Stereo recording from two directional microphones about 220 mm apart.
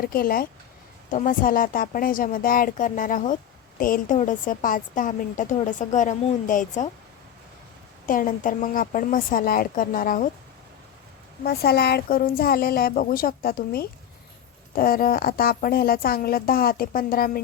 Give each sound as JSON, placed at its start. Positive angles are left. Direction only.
{"t": 0.0, "sound": "a woman's voice", "side_deg": 40}
{"t": 8.0, "sound": "a woman's voice", "side_deg": 40}
{"t": 11.4, "sound": "a woman's voice", "side_deg": 45}